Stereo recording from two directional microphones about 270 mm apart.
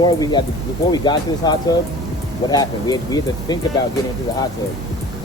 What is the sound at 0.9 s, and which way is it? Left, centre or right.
Speech, centre.